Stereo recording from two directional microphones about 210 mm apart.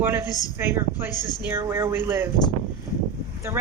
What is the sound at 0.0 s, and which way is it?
Speech, 10° right (ahead or behind).